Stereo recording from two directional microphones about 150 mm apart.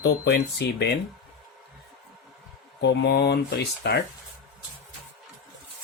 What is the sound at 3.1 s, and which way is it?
Speech, 90° left.